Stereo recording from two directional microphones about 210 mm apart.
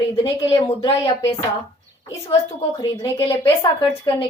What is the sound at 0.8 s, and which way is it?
Speech, 25° left (ahead or behind).